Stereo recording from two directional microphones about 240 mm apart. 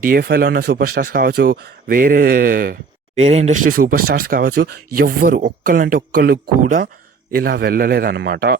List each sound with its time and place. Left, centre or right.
0.0 s speech: right